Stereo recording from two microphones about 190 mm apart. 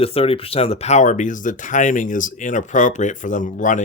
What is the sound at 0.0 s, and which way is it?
Speech, 30° left (ahead or behind).